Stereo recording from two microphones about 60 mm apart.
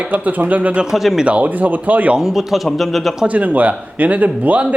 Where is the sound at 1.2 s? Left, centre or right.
Right.